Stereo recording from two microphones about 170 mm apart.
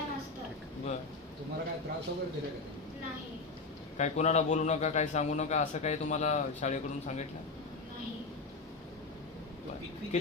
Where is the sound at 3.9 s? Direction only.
40° left (ahead or behind).